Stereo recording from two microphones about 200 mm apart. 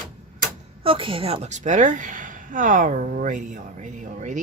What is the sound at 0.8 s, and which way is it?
A woman's voice, 25° right (ahead or behind).